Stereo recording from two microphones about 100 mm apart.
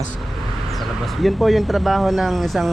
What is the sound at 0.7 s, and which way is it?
Speech, centre (ahead or behind).